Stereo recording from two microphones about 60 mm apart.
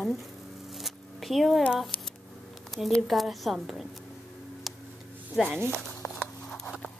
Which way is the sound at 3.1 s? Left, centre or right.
Centre.